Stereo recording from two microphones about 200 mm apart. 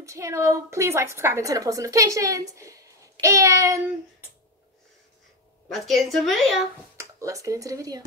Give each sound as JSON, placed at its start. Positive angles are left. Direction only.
{"t": 0.0, "sound": "a woman's voice", "side_deg": -15}
{"t": 5.7, "sound": "speech", "side_deg": 0}
{"t": 7.0, "sound": "speech", "side_deg": -15}